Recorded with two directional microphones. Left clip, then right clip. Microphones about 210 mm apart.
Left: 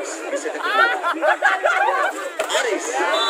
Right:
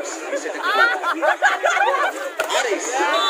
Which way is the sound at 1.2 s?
45° right (ahead or behind).